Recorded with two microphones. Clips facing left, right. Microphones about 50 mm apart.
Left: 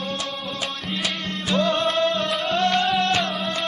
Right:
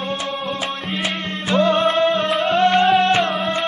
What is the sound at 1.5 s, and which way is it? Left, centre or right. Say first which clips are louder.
Music: right 5 dB; right.